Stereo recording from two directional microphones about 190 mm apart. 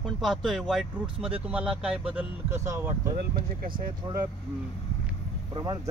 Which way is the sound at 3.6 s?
50° right (ahead or behind).